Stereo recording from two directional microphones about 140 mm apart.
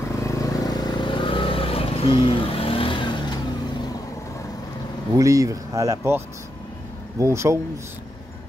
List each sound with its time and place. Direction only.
0.2 s vehicle: 25° left (ahead or behind)
5.1 s speech: 25° right (ahead or behind)